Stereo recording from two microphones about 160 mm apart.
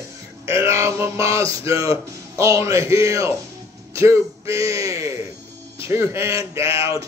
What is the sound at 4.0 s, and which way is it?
A man's voice, 20° right (ahead or behind).